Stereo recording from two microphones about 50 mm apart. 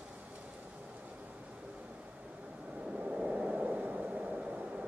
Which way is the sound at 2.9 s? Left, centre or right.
Right.